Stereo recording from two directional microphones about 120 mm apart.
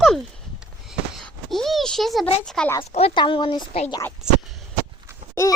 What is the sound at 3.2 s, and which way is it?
Speech, 45° left (ahead or behind).